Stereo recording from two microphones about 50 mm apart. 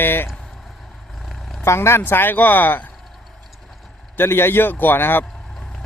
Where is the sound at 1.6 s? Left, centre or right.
Left.